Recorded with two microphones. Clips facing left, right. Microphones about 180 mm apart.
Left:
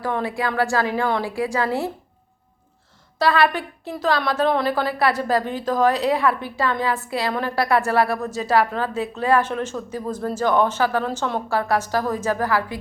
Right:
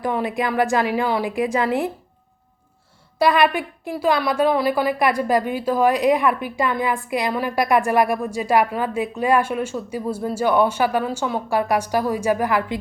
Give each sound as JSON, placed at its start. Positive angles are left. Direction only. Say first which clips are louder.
{"t": 0.0, "sound": "a woman's voice", "louder": "right 2 dB", "side_deg": -15}
{"t": 3.2, "sound": "a woman's voice", "louder": "right 2 dB", "side_deg": -15}